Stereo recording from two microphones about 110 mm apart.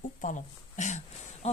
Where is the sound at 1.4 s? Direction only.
75° left (ahead or behind).